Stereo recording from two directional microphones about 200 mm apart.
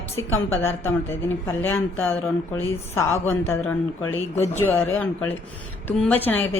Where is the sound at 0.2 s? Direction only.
15° left (ahead or behind).